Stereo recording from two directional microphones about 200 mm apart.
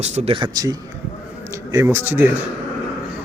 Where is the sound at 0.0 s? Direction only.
35° right (ahead or behind); by 2.3 s 10° right (ahead or behind).